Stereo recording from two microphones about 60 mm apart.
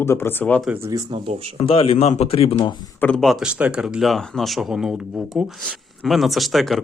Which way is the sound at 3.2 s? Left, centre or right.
Centre.